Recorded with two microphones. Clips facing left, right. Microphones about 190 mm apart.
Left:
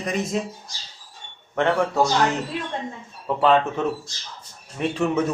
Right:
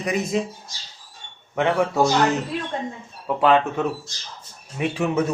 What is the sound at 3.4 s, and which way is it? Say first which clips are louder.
Speech: right 1 dB; 5° right (ahead or behind).